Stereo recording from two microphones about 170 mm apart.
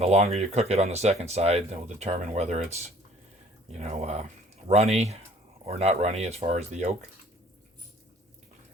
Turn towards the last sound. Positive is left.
turn(degrees=-40)  # may be behind; listen again after turning